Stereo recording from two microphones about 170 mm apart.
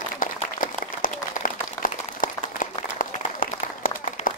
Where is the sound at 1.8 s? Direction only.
55° left (ahead or behind).